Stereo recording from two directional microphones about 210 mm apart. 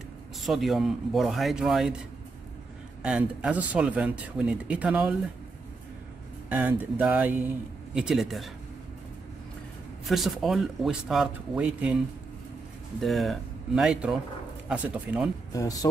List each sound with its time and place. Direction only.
0.4 s speech: centre (ahead or behind)
3.0 s speech: 5° right (ahead or behind)
6.5 s speech: 10° right (ahead or behind)
10.0 s speech: centre (ahead or behind)
13.0 s speech: centre (ahead or behind)
15.5 s speech: 15° left (ahead or behind)